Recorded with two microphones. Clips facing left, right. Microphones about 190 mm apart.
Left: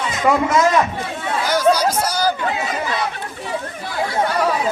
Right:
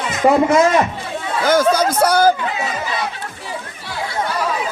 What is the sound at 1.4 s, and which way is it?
Speech, 50° right (ahead or behind).